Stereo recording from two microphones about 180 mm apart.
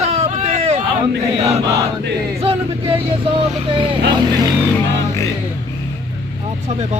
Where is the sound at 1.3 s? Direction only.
35° right (ahead or behind).